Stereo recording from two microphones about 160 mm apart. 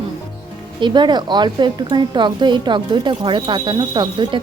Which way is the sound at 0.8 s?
30° right (ahead or behind).